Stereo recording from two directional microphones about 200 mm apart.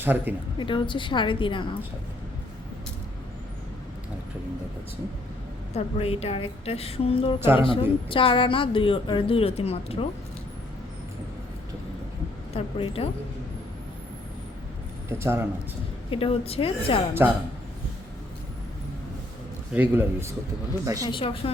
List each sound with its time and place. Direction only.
0.0 s a man's voice: 10° right (ahead or behind)
0.6 s speech: 25° left (ahead or behind)
5.7 s speech: 30° left (ahead or behind)
7.3 s a man's voice: 10° right (ahead or behind)
7.6 s speech: 25° left (ahead or behind)
12.5 s speech: 30° left (ahead or behind)
15.2 s a man's voice: 10° right (ahead or behind)
16.0 s speech: 25° left (ahead or behind)
17.2 s a man's voice: 10° right (ahead or behind)
19.7 s a man's voice: 10° right (ahead or behind)
21.1 s speech: 25° left (ahead or behind)